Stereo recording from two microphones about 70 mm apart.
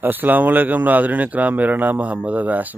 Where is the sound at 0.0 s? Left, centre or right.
Right.